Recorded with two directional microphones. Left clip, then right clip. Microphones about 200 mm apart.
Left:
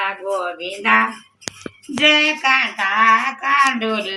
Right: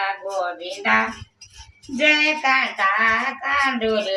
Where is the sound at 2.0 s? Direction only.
15° right (ahead or behind).